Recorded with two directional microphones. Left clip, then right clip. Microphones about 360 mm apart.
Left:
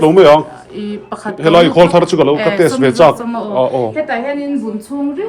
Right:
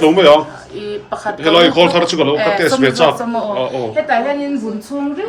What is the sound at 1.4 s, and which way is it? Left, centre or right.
A man's voice, centre.